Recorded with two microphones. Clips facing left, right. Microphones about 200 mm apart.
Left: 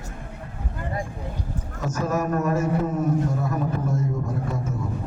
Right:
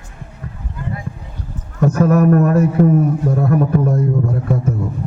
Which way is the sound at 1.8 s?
60° right (ahead or behind).